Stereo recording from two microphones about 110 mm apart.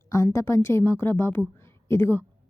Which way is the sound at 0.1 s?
25° left (ahead or behind).